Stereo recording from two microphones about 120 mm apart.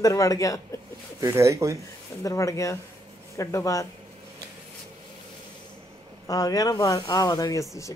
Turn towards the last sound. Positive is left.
turn(degrees=30)  # may be behind; listen again after turning